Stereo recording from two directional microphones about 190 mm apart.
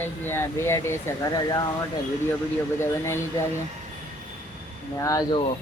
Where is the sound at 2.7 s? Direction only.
15° left (ahead or behind).